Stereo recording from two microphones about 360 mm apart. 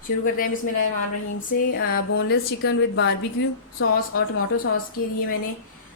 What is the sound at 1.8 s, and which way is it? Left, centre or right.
A woman's voice, left.